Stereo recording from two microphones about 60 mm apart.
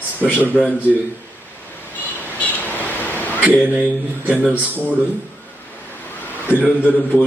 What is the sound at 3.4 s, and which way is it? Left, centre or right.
Speech, right.